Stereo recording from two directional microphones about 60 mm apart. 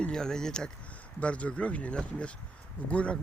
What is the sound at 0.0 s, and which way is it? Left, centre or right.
Speech, centre.